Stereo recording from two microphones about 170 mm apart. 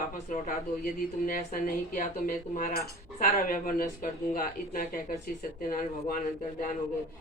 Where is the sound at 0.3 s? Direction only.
50° left (ahead or behind).